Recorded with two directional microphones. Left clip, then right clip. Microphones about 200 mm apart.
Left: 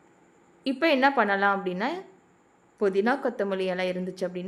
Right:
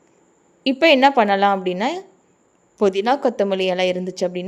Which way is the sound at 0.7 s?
25° right (ahead or behind).